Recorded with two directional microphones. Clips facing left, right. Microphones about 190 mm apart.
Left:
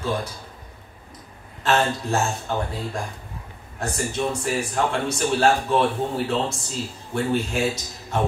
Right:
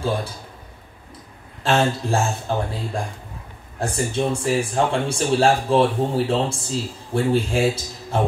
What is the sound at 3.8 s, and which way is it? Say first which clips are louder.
Speech: right 3 dB; 30° right (ahead or behind).